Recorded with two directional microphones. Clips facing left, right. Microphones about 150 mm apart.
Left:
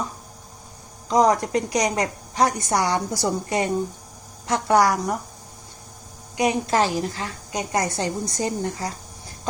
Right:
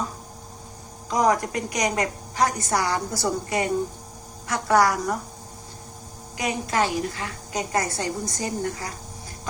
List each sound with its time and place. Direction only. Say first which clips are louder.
1.1 s a woman's voice: left 3 dB; 20° left (ahead or behind)
6.3 s a woman's voice: left 5 dB; 25° left (ahead or behind)
7.5 s a woman's voice: left 1 dB; 20° left (ahead or behind)